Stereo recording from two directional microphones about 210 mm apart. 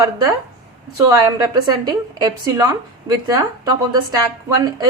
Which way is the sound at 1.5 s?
20° right (ahead or behind).